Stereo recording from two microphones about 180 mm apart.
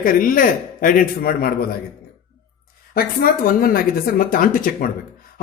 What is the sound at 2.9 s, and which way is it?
Speech, 55° left (ahead or behind).